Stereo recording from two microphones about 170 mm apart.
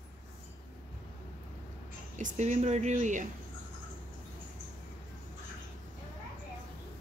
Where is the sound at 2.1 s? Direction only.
45° right (ahead or behind).